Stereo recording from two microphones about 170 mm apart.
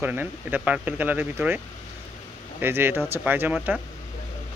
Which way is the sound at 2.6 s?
15° right (ahead or behind).